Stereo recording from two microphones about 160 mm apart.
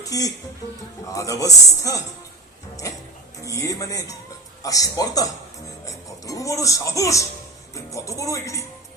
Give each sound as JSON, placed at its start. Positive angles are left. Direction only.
{"t": 0.0, "sound": "a man's voice", "side_deg": 20}
{"t": 3.4, "sound": "a man's voice", "side_deg": 20}
{"t": 5.8, "sound": "music", "side_deg": 20}
{"t": 7.7, "sound": "speech", "side_deg": 20}